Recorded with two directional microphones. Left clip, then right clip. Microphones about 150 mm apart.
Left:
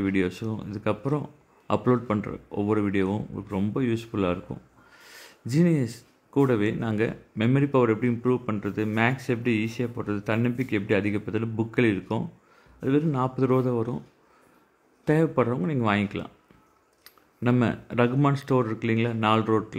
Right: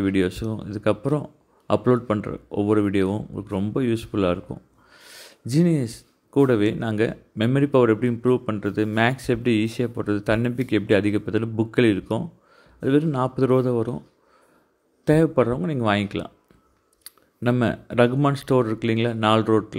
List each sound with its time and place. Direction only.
0.0 s speech: 20° right (ahead or behind)
15.0 s speech: 20° right (ahead or behind)
17.0 s a sound: 20° right (ahead or behind)
18.1 s speech: 20° right (ahead or behind)